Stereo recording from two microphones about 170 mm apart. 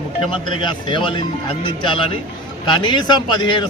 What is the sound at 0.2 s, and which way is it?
A man's voice, 30° left (ahead or behind).